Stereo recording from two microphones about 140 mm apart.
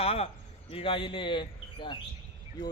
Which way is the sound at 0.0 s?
45° left (ahead or behind).